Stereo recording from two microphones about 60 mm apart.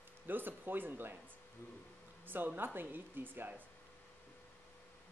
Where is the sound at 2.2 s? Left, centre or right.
Right.